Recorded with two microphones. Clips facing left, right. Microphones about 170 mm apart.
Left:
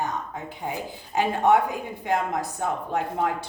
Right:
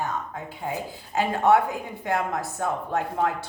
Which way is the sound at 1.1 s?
15° left (ahead or behind).